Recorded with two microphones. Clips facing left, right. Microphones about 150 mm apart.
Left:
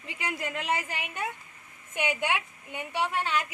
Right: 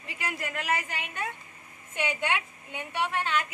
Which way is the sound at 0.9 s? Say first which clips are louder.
Left 1 dB; 15° left (ahead or behind).